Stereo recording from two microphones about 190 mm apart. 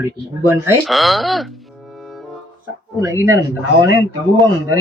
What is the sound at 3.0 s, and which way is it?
Speech, 15° right (ahead or behind).